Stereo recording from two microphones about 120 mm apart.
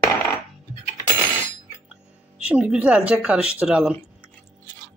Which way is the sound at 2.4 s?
10° right (ahead or behind).